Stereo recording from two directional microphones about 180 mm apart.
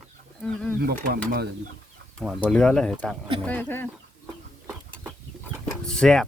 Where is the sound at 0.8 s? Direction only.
60° right (ahead or behind).